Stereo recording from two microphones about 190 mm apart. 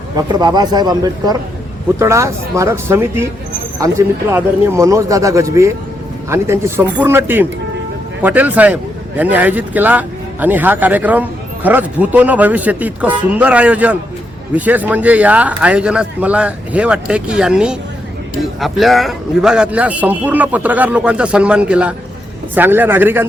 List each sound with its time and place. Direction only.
0.2 s a man's voice: 20° right (ahead or behind)